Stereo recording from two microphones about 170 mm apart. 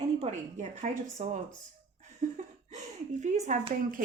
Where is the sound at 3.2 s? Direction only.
45° right (ahead or behind).